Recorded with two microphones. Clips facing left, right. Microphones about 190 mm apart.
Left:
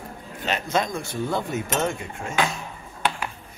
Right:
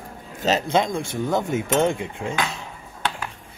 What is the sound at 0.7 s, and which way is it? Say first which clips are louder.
Speech: right 3 dB; 25° right (ahead or behind).